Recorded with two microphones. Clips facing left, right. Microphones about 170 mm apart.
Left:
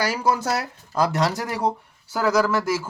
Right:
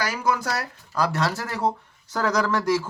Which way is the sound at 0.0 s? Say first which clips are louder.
Left 2 dB; 30° left (ahead or behind).